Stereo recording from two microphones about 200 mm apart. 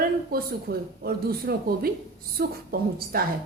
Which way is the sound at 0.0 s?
50° right (ahead or behind).